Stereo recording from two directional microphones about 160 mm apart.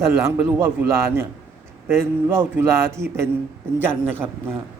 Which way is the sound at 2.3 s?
15° right (ahead or behind).